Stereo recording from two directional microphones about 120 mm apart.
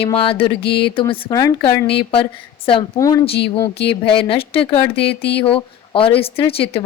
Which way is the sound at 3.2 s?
45° left (ahead or behind).